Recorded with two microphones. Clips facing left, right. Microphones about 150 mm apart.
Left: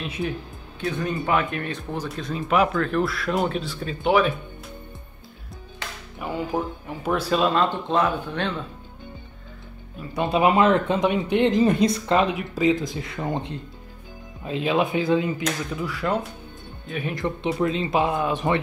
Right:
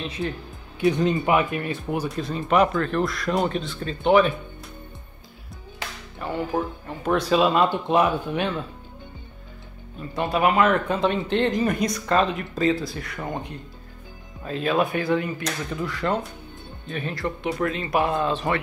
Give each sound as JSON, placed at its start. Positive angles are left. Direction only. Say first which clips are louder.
{"t": 0.0, "sound": "speech", "louder": "even", "side_deg": 10}
{"t": 0.7, "sound": "speech", "louder": "right 6 dB", "side_deg": -20}
{"t": 6.1, "sound": "speech", "louder": "right 1 dB", "side_deg": 10}
{"t": 10.1, "sound": "speech", "louder": "left 1 dB", "side_deg": 20}
{"t": 11.0, "sound": "speech", "louder": "left 2 dB", "side_deg": 15}
{"t": 15.7, "sound": "speech", "louder": "right 3 dB", "side_deg": 10}
{"t": 17.1, "sound": "speech", "louder": "left 2 dB", "side_deg": 20}